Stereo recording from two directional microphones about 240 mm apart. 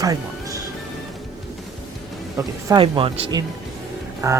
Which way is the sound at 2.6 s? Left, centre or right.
Centre.